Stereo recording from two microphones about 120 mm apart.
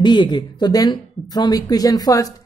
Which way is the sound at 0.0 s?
40° left (ahead or behind).